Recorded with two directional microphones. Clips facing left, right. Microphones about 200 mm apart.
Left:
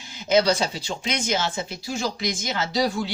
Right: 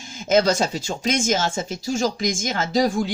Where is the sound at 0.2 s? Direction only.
45° right (ahead or behind).